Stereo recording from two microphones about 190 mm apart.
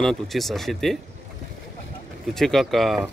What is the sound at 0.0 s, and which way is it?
Speech, centre (ahead or behind).